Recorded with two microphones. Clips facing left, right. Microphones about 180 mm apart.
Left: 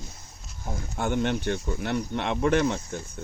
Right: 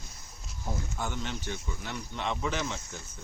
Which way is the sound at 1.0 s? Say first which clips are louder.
Left 13 dB; 60° left (ahead or behind).